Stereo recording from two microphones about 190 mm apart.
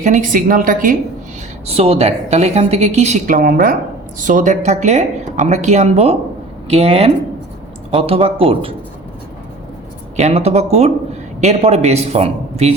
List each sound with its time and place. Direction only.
0.0 s a woman's voice: 40° right (ahead or behind)
1.6 s a woman's voice: 30° right (ahead or behind)
10.2 s a man's voice: 35° right (ahead or behind)